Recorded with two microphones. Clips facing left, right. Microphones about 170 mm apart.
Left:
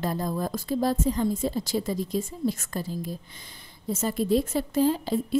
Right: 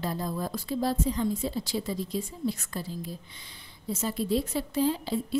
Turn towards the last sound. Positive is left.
turn(degrees=45)  # may be behind; listen again after turning